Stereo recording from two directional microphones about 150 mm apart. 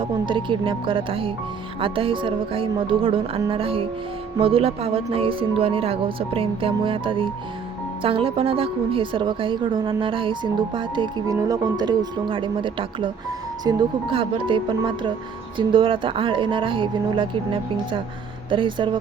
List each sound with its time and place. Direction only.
0.0 s a woman's voice: 35° right (ahead or behind)